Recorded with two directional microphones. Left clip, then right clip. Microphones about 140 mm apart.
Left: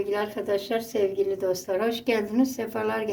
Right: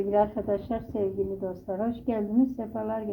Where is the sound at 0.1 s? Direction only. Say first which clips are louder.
Right 5 dB; 30° right (ahead or behind).